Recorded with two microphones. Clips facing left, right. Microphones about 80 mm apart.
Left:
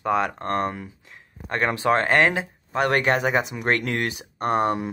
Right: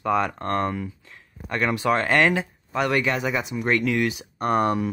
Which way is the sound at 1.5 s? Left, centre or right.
Left.